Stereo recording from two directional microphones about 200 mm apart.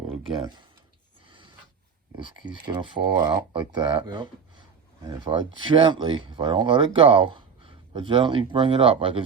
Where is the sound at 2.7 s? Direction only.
20° right (ahead or behind).